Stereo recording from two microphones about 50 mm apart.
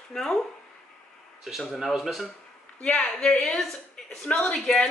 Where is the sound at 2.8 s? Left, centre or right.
Left.